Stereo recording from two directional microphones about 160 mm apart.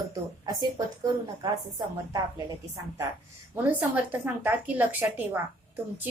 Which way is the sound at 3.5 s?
10° right (ahead or behind).